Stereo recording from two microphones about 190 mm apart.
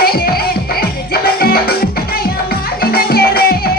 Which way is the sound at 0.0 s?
55° left (ahead or behind).